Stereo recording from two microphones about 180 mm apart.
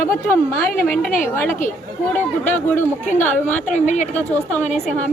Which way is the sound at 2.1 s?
10° left (ahead or behind).